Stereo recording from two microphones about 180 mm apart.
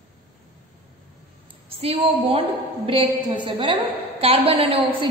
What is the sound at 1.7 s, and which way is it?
A woman's voice, 30° right (ahead or behind).